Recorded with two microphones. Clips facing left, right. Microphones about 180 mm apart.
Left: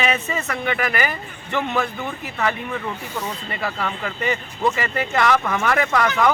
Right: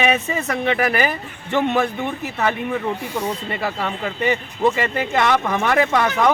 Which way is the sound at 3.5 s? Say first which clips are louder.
Right 2 dB; 25° right (ahead or behind).